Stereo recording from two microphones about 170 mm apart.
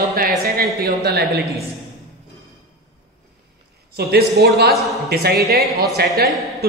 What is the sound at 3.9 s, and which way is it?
A man's voice, 70° right (ahead or behind).